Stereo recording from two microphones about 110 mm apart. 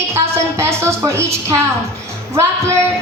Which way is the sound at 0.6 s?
25° right (ahead or behind).